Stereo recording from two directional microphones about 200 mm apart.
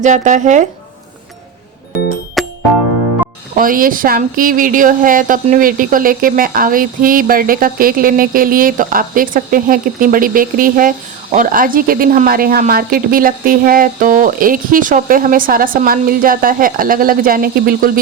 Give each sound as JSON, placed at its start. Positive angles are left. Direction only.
{"t": 0.0, "sound": "speech", "side_deg": -40}
{"t": 2.4, "sound": "music", "side_deg": 0}
{"t": 3.5, "sound": "speech", "side_deg": -45}